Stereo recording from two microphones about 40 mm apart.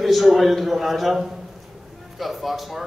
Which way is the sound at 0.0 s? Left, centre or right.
Centre.